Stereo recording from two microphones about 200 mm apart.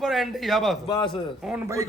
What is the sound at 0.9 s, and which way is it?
Speech, 20° left (ahead or behind).